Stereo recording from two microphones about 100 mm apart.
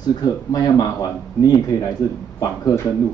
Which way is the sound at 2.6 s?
25° left (ahead or behind).